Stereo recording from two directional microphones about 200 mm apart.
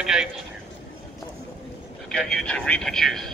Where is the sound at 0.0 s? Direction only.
5° right (ahead or behind).